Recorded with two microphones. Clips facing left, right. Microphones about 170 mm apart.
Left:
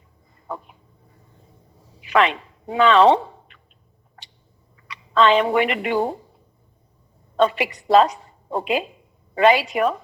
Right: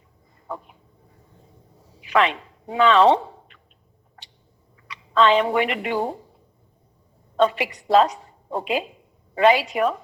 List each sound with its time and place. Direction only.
2.0 s speech: 70° left (ahead or behind)
4.9 s speech: 70° left (ahead or behind)
7.3 s a woman's voice: 70° left (ahead or behind)